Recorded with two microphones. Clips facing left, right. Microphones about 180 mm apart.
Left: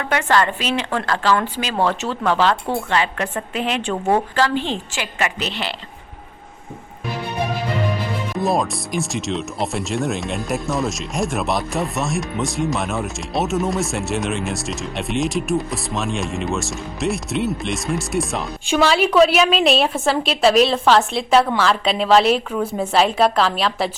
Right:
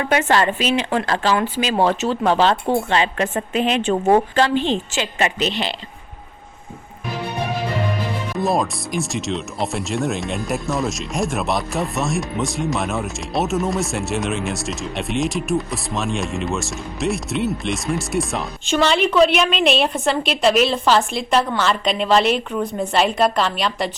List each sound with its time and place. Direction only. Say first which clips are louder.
0.0 s speech: right 1 dB; 20° right (ahead or behind)
8.4 s speech: even; centre (ahead or behind)